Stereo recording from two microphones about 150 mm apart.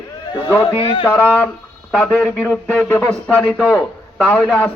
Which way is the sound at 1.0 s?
10° left (ahead or behind).